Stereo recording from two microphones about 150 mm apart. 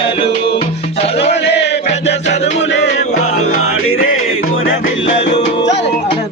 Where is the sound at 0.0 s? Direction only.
35° left (ahead or behind).